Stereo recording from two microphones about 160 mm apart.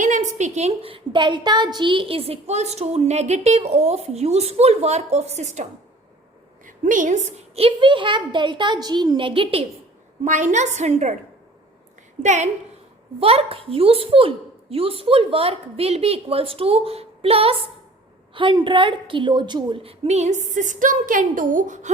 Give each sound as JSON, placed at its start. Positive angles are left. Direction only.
{"t": 0.0, "sound": "a woman's voice", "side_deg": -50}
{"t": 6.7, "sound": "a woman's voice", "side_deg": -55}
{"t": 10.2, "sound": "a woman's voice", "side_deg": -50}
{"t": 12.2, "sound": "a woman's voice", "side_deg": -50}
{"t": 13.1, "sound": "a woman's voice", "side_deg": -35}